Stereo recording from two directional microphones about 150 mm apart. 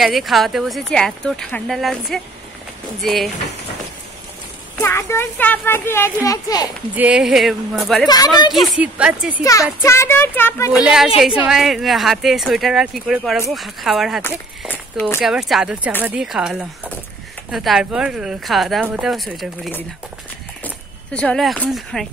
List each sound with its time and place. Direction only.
0.0 s speech: centre (ahead or behind)
4.8 s speech: 15° left (ahead or behind)
7.0 s speech: 5° right (ahead or behind)
8.1 s speech: 25° left (ahead or behind)
8.6 s speech: 5° right (ahead or behind)
9.4 s speech: 20° left (ahead or behind)
10.7 s speech: 5° right (ahead or behind)
14.7 s speech: 10° left (ahead or behind)
15.1 s speech: 5° right (ahead or behind)